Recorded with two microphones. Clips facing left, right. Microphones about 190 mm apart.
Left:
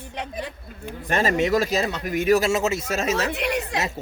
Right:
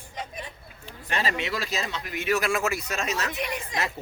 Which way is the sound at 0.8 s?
45° left (ahead or behind).